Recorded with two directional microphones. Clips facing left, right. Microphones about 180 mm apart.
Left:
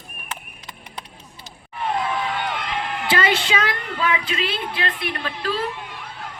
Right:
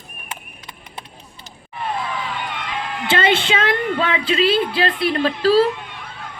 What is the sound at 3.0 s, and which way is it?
A woman's voice, 25° right (ahead or behind).